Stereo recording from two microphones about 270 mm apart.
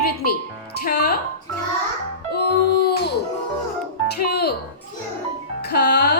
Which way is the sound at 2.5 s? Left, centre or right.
Left.